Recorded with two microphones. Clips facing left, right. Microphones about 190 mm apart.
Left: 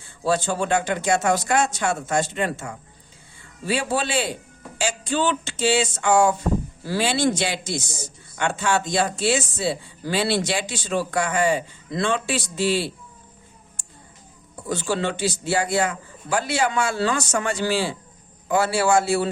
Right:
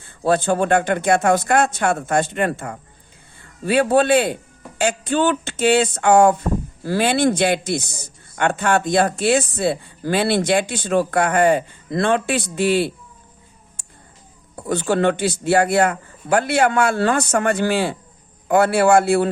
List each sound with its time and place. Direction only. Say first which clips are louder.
0.0 s speech: right 4 dB; 55° right (ahead or behind)
14.7 s speech: right 6 dB; 55° right (ahead or behind)